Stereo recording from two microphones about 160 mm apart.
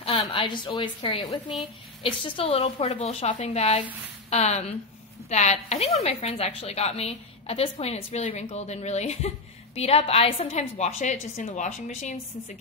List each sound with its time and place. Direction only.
0.0 s a woman's voice: 35° left (ahead or behind)